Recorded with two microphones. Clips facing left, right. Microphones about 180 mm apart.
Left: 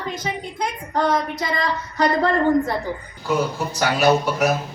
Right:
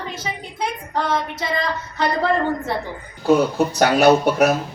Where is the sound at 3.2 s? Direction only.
70° right (ahead or behind).